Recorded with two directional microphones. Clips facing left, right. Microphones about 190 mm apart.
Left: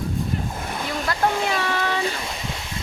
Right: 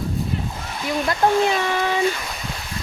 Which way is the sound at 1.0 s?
20° right (ahead or behind).